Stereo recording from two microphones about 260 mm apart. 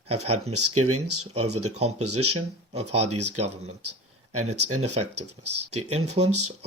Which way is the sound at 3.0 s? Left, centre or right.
Right.